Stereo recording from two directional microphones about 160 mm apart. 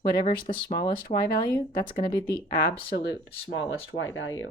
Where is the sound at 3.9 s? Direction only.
45° left (ahead or behind).